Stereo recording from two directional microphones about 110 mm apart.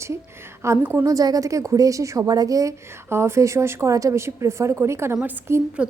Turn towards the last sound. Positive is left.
turn(degrees=-25)  # may be behind; listen again after turning